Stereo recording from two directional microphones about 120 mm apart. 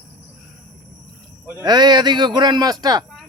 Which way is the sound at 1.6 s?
35° right (ahead or behind).